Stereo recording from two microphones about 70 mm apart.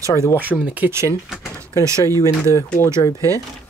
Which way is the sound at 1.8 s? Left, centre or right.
Right.